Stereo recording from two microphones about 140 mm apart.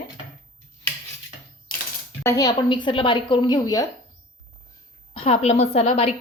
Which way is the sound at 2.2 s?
25° left (ahead or behind).